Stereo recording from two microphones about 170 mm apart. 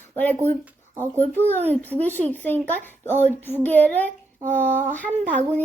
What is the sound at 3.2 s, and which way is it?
Child singing, 10° left (ahead or behind).